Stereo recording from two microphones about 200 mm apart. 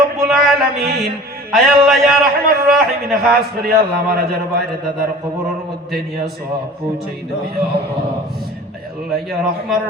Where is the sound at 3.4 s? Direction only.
50° right (ahead or behind).